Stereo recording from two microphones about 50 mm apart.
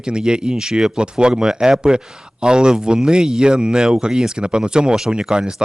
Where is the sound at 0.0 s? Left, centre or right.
Centre.